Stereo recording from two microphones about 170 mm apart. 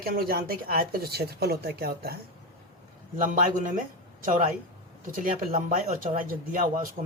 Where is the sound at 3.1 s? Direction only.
50° right (ahead or behind).